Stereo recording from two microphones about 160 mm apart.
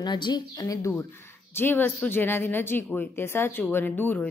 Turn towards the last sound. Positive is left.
turn(degrees=10)  # may be behind; listen again after turning